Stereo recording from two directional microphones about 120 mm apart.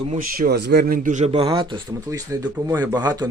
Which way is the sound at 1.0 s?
85° right.